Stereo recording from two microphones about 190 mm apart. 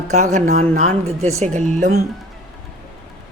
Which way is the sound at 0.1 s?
35° right (ahead or behind).